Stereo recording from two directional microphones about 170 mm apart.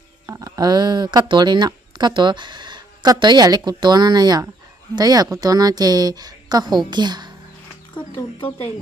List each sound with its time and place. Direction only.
0.3 s speech: 20° right (ahead or behind)